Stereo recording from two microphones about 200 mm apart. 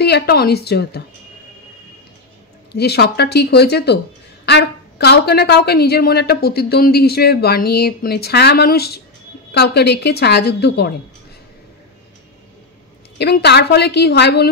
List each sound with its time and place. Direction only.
0.0 s a woman's voice: 55° left (ahead or behind)
2.7 s a woman's voice: 55° left (ahead or behind)
13.2 s a woman's voice: 55° left (ahead or behind)